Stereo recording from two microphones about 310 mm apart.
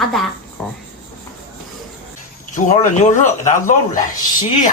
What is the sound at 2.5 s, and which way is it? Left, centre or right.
Speech, left.